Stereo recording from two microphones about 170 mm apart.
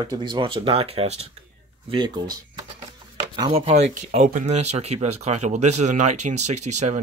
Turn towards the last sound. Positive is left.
turn(degrees=-45)  # may be behind; listen again after turning